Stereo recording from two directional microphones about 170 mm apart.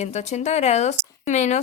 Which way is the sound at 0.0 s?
40° left (ahead or behind).